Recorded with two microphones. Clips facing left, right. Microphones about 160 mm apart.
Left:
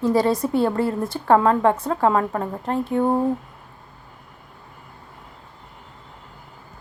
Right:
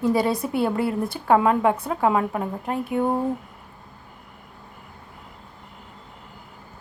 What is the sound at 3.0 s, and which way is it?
Speech, 20° left (ahead or behind).